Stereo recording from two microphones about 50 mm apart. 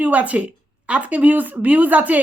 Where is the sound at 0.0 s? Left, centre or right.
Right.